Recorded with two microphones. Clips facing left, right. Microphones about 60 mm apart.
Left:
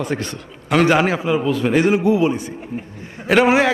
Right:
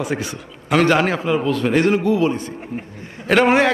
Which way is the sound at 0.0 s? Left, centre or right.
Centre.